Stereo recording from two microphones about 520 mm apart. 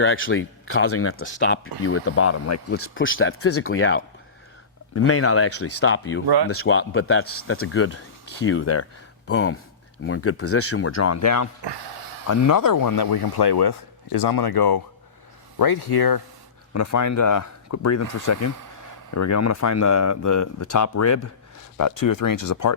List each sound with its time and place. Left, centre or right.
0.0 s speech: left
11.6 s a sound: right
12.3 s speech: left
16.7 s speech: left